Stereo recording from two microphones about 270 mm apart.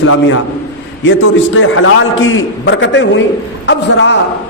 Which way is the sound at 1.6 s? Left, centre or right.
Left.